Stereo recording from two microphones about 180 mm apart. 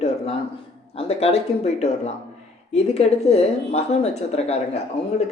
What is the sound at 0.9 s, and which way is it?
Speech, 35° left (ahead or behind).